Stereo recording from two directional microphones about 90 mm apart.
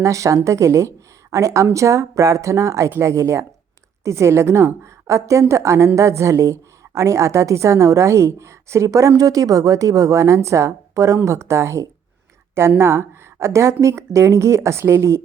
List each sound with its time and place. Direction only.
0.0 s a woman's voice: 35° right (ahead or behind)